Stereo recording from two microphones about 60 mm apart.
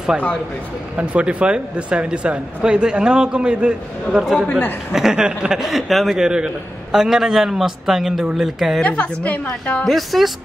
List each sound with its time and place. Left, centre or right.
0.9 s a man's voice: right
4.5 s a man's voice: left
4.9 s a man's voice: centre
8.8 s a woman's voice: left
9.8 s a woman's voice: centre